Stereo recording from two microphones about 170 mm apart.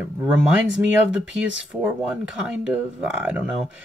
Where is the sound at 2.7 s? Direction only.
10° right (ahead or behind).